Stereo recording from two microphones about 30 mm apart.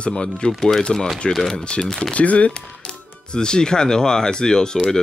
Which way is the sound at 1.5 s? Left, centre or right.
Left.